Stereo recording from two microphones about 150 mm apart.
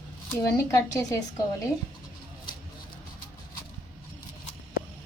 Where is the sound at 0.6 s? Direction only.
20° left (ahead or behind).